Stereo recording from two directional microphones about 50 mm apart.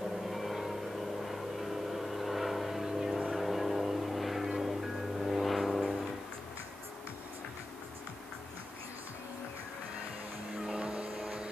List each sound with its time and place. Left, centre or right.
0.2 s music: centre
1.2 s vehicle: centre
3.3 s music: centre
10.6 s vehicle: centre